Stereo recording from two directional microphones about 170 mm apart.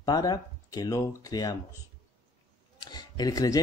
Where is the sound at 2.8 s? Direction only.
25° left (ahead or behind).